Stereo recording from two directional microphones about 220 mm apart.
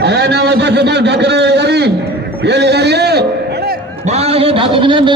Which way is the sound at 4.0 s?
30° right (ahead or behind).